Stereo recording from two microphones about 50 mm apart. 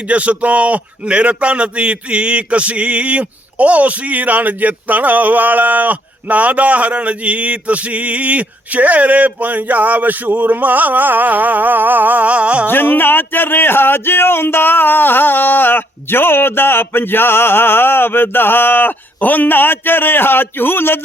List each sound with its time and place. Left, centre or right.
0.1 s a man's voice: right
12.6 s speech: left